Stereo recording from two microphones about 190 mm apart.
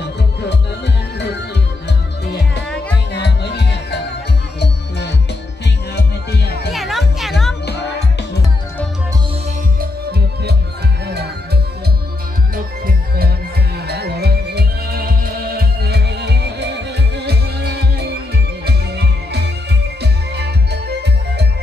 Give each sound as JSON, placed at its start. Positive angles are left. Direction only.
{"t": 1.9, "sound": "music", "side_deg": 60}
{"t": 6.7, "sound": "music", "side_deg": 0}
{"t": 7.6, "sound": "music", "side_deg": 60}
{"t": 9.8, "sound": "music", "side_deg": -60}